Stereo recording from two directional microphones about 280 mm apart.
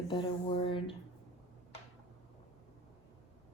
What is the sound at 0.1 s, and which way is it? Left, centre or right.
Speech, centre.